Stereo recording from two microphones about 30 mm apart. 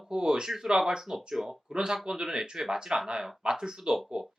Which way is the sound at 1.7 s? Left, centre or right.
Right.